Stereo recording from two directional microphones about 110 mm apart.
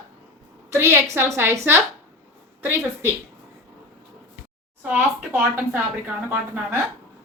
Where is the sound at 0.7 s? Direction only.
20° right (ahead or behind).